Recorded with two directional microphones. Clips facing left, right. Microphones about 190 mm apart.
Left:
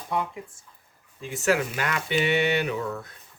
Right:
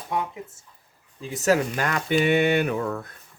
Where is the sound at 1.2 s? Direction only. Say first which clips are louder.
Right 3 dB; 35° right (ahead or behind); by 3.1 s 55° right (ahead or behind).